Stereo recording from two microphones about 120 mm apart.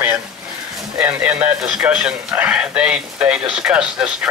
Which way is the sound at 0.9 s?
10° right (ahead or behind).